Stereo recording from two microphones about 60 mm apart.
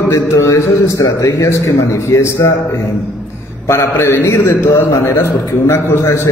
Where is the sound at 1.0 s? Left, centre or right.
Left.